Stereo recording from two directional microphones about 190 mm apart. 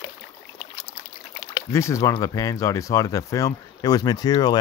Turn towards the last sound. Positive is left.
turn(degrees=20)  # may be behind; listen again after turning